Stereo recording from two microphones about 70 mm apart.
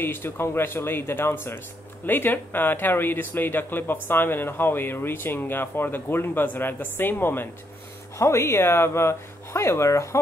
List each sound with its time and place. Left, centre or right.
0.0 s speech: left
8.2 s speech: left